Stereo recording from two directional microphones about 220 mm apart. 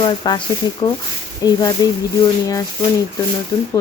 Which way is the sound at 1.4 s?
15° left (ahead or behind).